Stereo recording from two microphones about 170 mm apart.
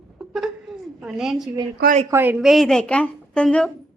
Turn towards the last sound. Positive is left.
turn(degrees=5)  # may be behind; listen again after turning